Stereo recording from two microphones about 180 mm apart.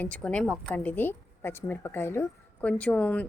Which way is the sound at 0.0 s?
5° left (ahead or behind).